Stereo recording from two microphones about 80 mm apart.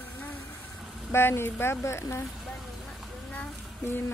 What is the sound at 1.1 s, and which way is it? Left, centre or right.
Speech, left.